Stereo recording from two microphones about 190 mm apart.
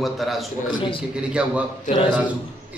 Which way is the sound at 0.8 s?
25° left (ahead or behind).